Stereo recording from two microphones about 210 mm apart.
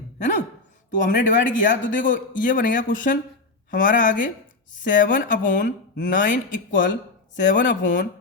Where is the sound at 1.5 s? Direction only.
60° left (ahead or behind).